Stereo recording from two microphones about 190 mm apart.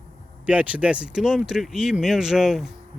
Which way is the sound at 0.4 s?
5° right (ahead or behind).